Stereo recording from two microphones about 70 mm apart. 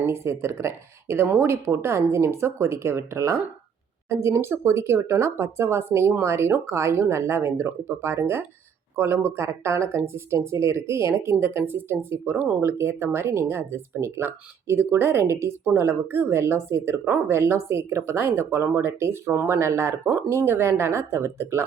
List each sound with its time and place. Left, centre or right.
0.0 s speech: right